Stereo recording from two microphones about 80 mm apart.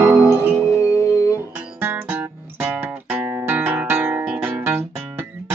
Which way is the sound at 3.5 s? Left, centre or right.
Right.